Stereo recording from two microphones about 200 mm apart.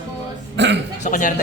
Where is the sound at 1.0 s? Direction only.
40° left (ahead or behind).